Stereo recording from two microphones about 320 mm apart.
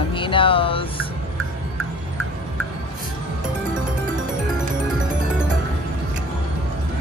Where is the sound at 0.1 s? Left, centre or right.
Centre.